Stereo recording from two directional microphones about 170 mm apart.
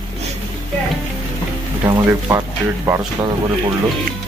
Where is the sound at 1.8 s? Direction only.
20° right (ahead or behind).